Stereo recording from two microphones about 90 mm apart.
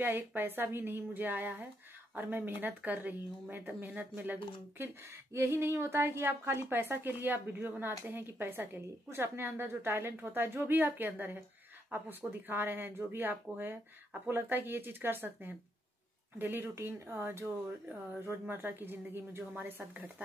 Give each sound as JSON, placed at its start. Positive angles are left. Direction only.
{"t": 0.0, "sound": "a woman's voice", "side_deg": -20}